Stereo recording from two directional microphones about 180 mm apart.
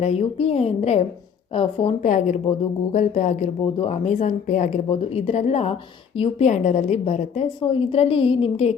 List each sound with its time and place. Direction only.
0.0 s speech: 35° left (ahead or behind)